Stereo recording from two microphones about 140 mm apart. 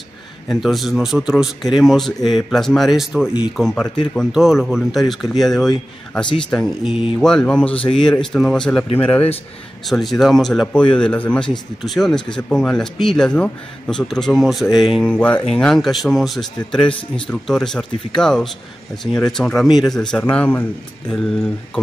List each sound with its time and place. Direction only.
0.5 s speech: centre (ahead or behind)
9.8 s speech: centre (ahead or behind)
15.1 s speech: 10° left (ahead or behind)